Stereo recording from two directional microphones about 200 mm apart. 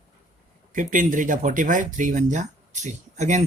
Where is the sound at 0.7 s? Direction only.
40° right (ahead or behind).